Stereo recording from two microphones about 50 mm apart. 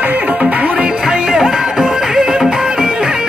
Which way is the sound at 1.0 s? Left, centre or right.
Centre.